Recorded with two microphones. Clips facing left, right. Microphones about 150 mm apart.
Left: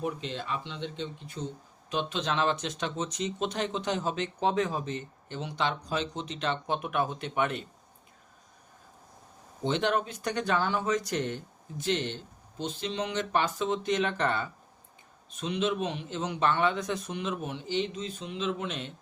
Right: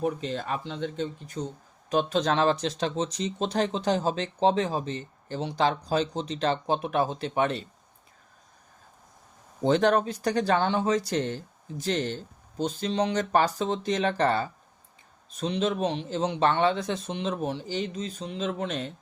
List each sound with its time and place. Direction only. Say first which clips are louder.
0.0 s speech: right 5 dB; 40° right (ahead or behind)
9.6 s speech: right 6 dB; 40° right (ahead or behind)